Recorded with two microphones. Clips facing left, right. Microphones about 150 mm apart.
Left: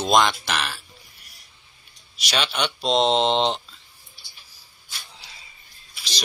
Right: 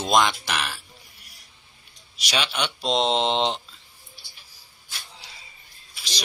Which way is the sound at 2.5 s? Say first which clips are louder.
Left 4 dB; 10° right (ahead or behind).